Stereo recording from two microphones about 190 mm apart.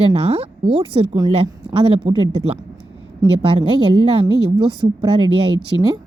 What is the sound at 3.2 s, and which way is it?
A woman's voice, 25° right (ahead or behind).